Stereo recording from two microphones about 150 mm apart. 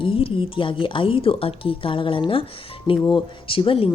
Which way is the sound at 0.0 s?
35° left (ahead or behind).